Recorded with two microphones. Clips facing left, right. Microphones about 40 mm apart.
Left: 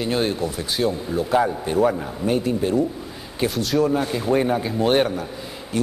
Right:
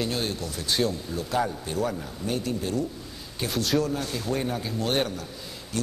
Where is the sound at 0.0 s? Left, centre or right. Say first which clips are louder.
Left 7 dB; left.